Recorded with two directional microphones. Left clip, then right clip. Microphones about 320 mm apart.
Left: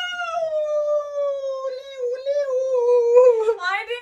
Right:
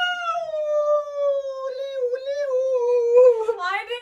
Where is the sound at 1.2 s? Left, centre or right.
Centre; by 3.5 s left.